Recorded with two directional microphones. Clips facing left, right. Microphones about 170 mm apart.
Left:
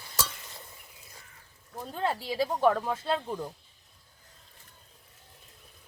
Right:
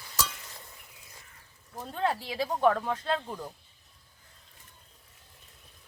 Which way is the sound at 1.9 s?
Centre (ahead or behind).